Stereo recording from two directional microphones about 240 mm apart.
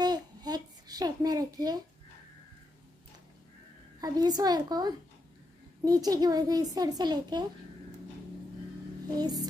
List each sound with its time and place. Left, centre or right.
0.0 s a sound: centre
4.0 s a child's voice: centre
9.1 s a child's voice: centre